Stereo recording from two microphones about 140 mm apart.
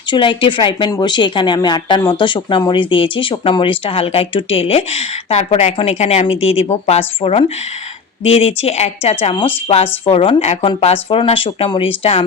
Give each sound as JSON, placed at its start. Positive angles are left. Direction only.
{"t": 0.1, "sound": "speech", "side_deg": 35}